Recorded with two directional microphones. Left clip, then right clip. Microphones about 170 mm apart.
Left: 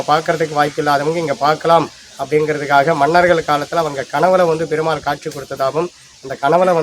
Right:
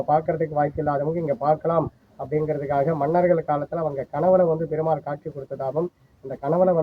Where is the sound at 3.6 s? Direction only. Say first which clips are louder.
Left 8 dB; 35° left (ahead or behind).